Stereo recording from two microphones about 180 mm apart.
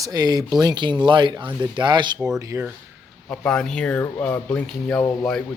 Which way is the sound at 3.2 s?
5° left (ahead or behind).